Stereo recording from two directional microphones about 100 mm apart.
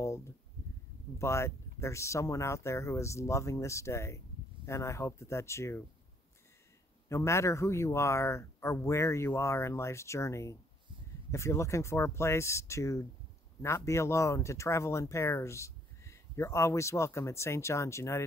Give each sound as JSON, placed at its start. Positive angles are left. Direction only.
{"t": 0.0, "sound": "a sound", "side_deg": 30}
{"t": 1.1, "sound": "speech", "side_deg": 30}
{"t": 7.1, "sound": "speech", "side_deg": 30}